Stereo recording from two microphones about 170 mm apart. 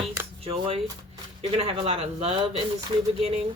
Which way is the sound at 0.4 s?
35° right (ahead or behind).